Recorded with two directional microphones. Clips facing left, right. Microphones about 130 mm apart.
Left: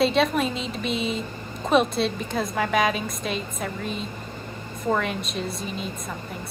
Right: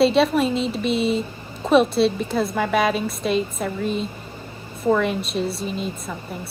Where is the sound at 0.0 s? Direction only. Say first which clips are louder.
Right 4 dB; centre (ahead or behind).